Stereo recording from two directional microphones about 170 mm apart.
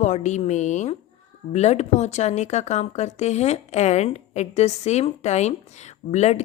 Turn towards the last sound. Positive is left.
turn(degrees=40)  # may be behind; listen again after turning